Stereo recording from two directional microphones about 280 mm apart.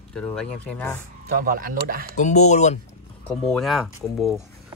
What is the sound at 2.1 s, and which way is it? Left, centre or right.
Speech, left.